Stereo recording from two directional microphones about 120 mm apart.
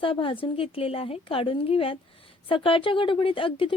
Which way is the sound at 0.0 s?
45° left (ahead or behind).